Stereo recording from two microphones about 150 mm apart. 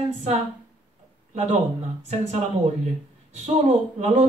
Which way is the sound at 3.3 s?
50° right (ahead or behind).